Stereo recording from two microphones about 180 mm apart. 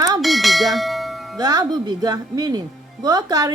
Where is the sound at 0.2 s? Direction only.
Centre (ahead or behind).